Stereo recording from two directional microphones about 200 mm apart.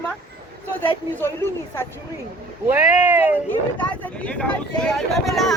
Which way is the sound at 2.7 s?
10° right (ahead or behind).